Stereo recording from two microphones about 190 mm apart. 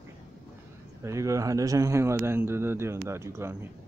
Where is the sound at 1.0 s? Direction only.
15° right (ahead or behind).